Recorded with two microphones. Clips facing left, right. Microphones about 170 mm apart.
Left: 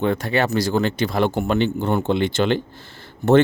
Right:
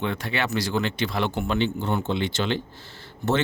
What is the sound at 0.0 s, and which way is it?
Speech, 45° left (ahead or behind).